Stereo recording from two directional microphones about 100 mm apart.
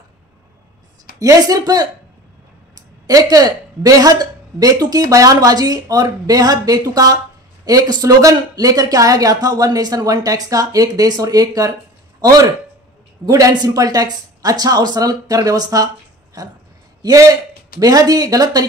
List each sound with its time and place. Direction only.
1.2 s a woman's voice: 40° right (ahead or behind)
17.0 s a woman's voice: 35° right (ahead or behind)